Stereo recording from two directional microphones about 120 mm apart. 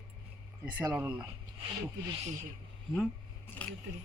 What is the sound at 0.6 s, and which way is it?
Speech, 10° right (ahead or behind).